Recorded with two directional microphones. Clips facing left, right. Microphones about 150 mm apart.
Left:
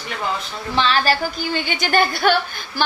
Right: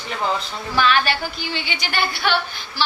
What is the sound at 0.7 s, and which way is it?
A woman's voice, 30° left (ahead or behind).